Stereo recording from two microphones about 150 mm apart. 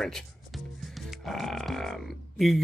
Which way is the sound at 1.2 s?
Centre (ahead or behind).